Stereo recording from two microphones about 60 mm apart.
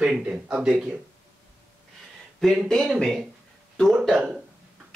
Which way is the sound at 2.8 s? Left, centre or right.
Centre.